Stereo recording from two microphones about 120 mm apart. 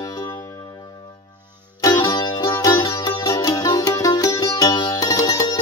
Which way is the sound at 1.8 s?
35° left (ahead or behind).